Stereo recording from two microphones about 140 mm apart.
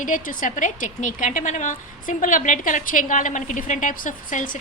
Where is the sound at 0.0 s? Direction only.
70° left (ahead or behind).